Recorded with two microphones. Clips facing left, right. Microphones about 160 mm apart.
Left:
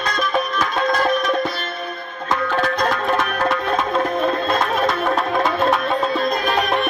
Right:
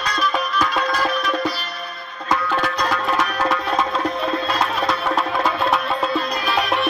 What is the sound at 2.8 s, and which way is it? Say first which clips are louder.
Music: left 2 dB; 50° left (ahead or behind).